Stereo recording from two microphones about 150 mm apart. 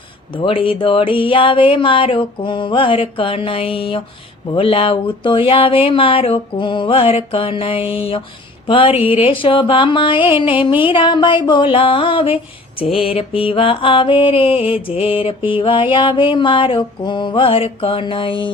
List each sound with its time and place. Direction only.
0.3 s mantra: 35° left (ahead or behind)